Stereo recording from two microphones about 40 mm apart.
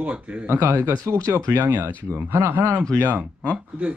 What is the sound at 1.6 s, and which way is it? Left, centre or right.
Speech, right.